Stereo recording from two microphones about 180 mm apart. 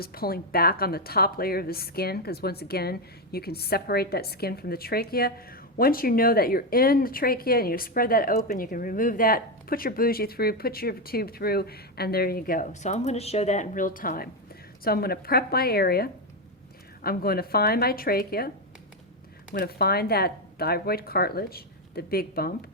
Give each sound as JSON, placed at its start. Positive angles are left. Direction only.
{"t": 0.0, "sound": "speech", "side_deg": 55}
{"t": 19.5, "sound": "speech", "side_deg": 60}